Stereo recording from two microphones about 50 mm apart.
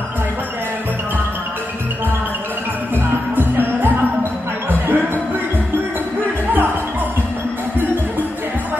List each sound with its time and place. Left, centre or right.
3.3 s music: right